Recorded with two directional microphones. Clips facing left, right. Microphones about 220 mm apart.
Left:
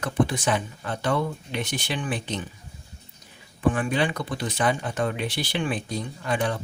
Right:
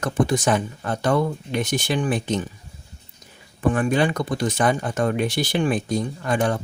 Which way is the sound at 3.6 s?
45° right (ahead or behind).